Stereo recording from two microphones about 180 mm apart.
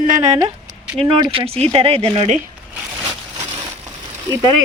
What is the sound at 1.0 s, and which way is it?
Speech, 30° right (ahead or behind).